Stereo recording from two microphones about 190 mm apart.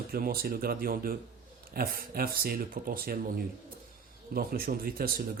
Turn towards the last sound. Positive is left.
turn(degrees=-50)  # may be behind; listen again after turning